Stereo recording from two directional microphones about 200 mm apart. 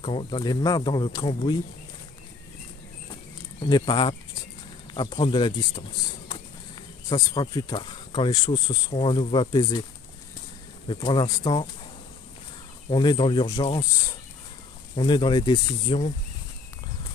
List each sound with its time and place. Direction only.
0.0 s speech: 25° left (ahead or behind)
3.6 s speech: 25° left (ahead or behind)
10.9 s speech: 25° left (ahead or behind)
12.9 s speech: 25° left (ahead or behind)
15.0 s speech: 25° left (ahead or behind)